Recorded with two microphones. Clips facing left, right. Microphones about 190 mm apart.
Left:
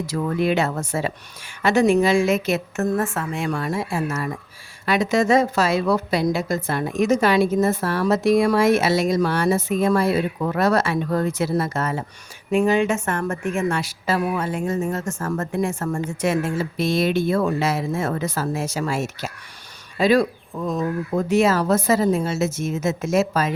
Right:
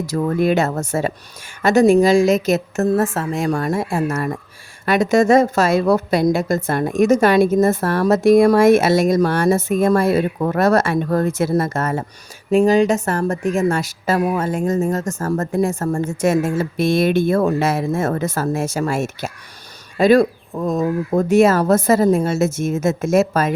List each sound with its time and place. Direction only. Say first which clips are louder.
0.0 s a woman's voice: right 4 dB; 40° right (ahead or behind)
12.5 s a woman's voice: right 5 dB; 35° right (ahead or behind)